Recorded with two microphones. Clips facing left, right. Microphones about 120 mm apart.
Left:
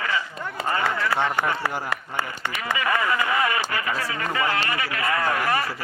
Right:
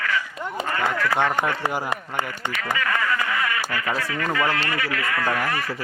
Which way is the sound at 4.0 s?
30° left (ahead or behind).